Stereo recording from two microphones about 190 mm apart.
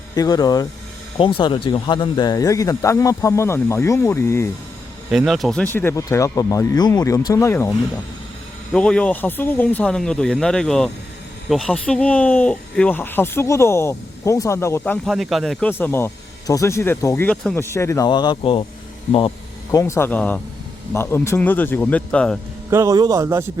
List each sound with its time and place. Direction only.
0.1 s speech: 20° left (ahead or behind)
5.1 s speech: centre (ahead or behind)
15.0 s speech: centre (ahead or behind)
15.7 s speech: 10° left (ahead or behind)
19.7 s speech: 15° left (ahead or behind)
22.7 s a man's voice: 15° right (ahead or behind)